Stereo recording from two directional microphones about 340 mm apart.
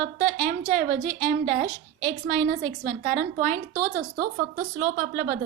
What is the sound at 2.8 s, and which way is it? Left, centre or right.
A woman's voice, right.